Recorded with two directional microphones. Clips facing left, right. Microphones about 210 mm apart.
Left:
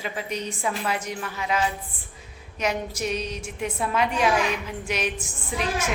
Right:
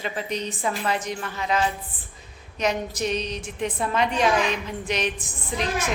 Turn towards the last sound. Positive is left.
turn(degrees=10)  # may be behind; listen again after turning